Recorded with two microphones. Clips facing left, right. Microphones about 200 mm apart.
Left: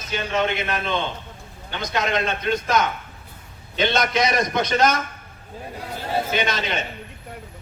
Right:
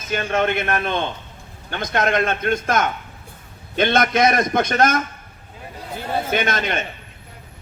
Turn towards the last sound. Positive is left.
turn(degrees=-50)  # may be behind; listen again after turning